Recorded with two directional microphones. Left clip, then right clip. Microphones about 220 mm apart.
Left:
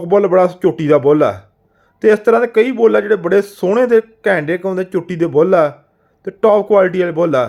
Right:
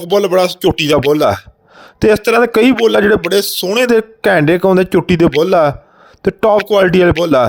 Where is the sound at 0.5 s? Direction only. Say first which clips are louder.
Right 1 dB; 40° right (ahead or behind).